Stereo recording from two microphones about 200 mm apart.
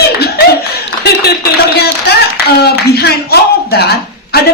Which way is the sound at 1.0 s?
55° left (ahead or behind).